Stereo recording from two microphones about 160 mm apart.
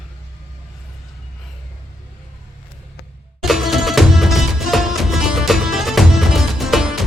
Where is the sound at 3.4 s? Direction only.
Centre (ahead or behind).